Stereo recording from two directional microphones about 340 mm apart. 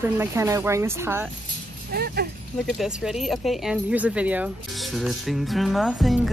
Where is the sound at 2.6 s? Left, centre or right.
Centre.